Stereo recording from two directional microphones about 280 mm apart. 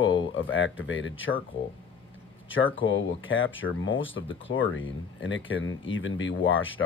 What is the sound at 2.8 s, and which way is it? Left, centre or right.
Speech, left.